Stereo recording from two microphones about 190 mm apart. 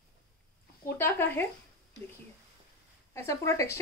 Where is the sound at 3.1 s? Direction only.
15° left (ahead or behind).